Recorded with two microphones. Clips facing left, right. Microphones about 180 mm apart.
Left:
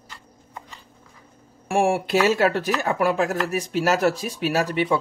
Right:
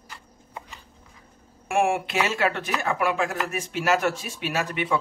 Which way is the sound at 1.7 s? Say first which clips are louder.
Left 3 dB; 30° left (ahead or behind).